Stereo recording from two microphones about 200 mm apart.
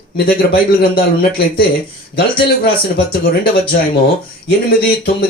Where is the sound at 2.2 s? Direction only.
50° left (ahead or behind).